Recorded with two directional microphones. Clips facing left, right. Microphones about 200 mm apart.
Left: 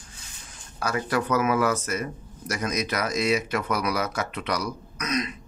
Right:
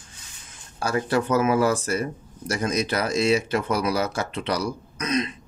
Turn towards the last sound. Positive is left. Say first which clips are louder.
# right 3 dB
turn(degrees=-30)  # may be behind; listen again after turning